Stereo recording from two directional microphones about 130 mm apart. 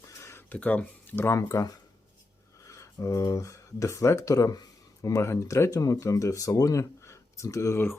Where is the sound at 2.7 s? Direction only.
25° left (ahead or behind).